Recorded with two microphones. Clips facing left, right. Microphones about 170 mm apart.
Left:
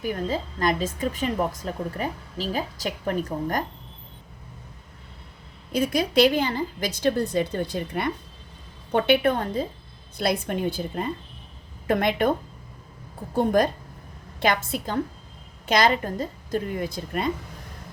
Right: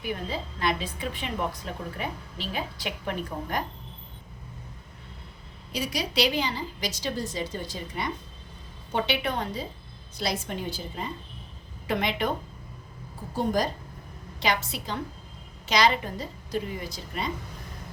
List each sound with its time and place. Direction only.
0.0 s a woman's voice: 45° left (ahead or behind)
5.7 s a woman's voice: 50° left (ahead or behind)
13.3 s a woman's voice: 60° left (ahead or behind)